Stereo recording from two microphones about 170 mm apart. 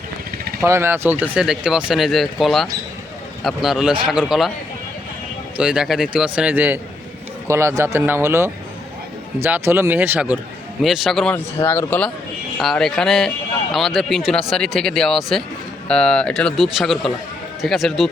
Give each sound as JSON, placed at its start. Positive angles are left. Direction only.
{"t": 0.6, "sound": "speech", "side_deg": -15}
{"t": 5.5, "sound": "speech", "side_deg": -5}
{"t": 11.6, "sound": "speech", "side_deg": 15}